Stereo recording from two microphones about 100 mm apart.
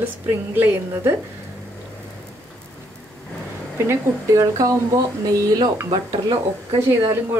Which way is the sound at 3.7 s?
25° right (ahead or behind).